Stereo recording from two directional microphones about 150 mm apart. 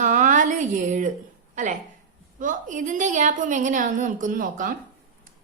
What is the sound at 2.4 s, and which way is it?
A woman's voice, 60° right (ahead or behind).